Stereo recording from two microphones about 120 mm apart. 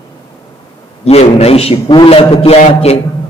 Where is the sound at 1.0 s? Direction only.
60° left (ahead or behind).